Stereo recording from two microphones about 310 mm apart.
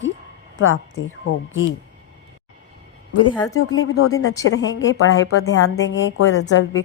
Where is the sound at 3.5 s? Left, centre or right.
Left.